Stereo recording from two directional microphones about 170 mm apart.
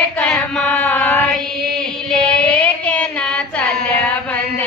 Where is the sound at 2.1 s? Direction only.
5° left (ahead or behind).